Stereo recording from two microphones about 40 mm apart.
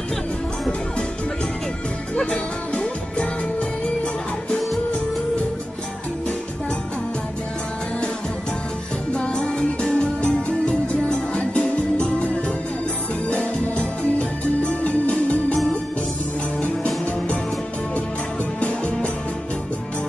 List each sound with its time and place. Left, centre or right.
2.1 s music: left
9.1 s music: left
13.3 s music: left
18.6 s music: left